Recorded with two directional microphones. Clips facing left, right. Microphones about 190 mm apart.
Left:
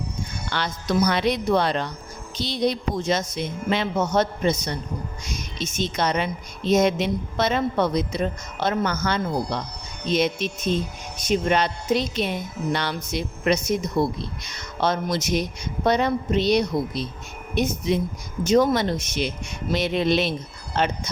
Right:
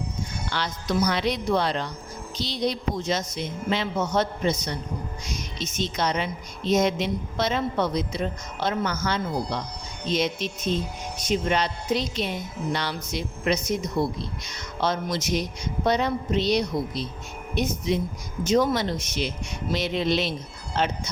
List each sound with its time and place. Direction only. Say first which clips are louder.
0.5 s a woman's voice: left 3 dB; 55° left (ahead or behind)
5.5 s a woman's voice: left 3 dB; 55° left (ahead or behind)